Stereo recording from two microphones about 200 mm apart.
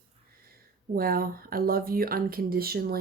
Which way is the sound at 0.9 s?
45° right (ahead or behind).